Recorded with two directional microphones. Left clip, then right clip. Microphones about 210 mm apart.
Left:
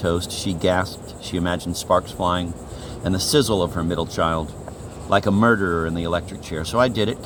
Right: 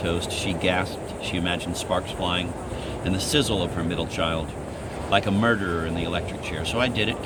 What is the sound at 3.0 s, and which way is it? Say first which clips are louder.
Speech: left 5 dB; 30° left (ahead or behind).